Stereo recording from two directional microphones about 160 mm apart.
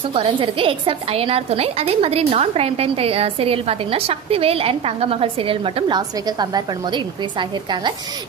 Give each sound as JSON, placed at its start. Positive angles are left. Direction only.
{"t": 0.1, "sound": "a woman's voice", "side_deg": -35}